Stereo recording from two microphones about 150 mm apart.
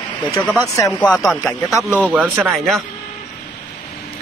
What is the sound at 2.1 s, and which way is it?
Speech, 10° right (ahead or behind).